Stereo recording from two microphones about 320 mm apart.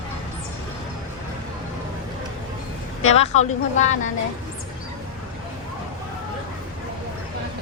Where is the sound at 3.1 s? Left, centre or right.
Centre.